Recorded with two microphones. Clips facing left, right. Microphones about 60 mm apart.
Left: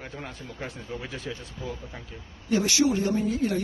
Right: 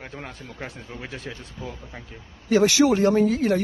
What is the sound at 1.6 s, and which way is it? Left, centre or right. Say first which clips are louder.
Speech: right 2 dB; centre.